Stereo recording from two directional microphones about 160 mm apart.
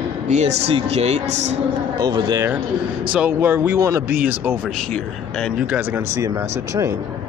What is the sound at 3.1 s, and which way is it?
Speech, 10° right (ahead or behind).